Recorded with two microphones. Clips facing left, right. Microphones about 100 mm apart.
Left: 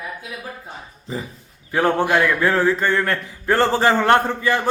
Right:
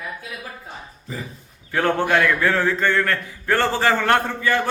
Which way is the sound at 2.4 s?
20° left (ahead or behind).